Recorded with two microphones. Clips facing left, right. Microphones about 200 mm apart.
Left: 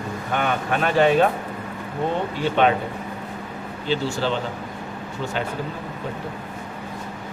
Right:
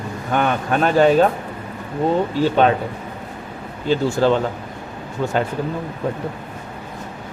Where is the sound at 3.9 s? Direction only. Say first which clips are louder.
Right 7 dB; 45° right (ahead or behind).